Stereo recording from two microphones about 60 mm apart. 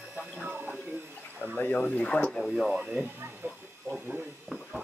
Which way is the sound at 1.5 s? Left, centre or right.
Left.